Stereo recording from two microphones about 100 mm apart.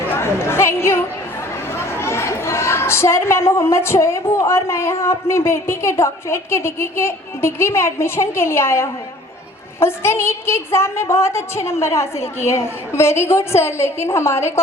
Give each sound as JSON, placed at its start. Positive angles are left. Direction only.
{"t": 0.1, "sound": "chatter", "side_deg": 25}
{"t": 2.0, "sound": "a woman's voice", "side_deg": 25}